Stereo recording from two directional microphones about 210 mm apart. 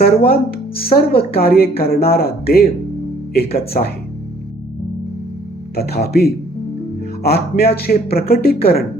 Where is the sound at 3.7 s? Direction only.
40° left (ahead or behind).